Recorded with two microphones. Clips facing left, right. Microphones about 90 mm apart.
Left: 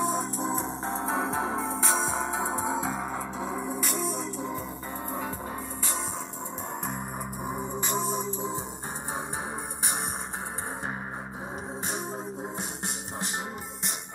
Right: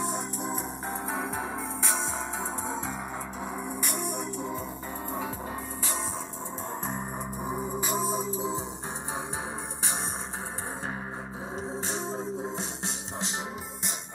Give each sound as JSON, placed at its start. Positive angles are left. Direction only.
{"t": 0.0, "sound": "music", "side_deg": 35}
{"t": 3.3, "sound": "music", "side_deg": 55}
{"t": 4.0, "sound": "music", "side_deg": -65}
{"t": 7.4, "sound": "music", "side_deg": 0}
{"t": 11.9, "sound": "music", "side_deg": 15}